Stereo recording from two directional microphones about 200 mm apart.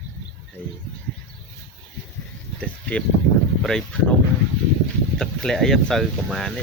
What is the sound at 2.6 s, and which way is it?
Speech, 5° left (ahead or behind).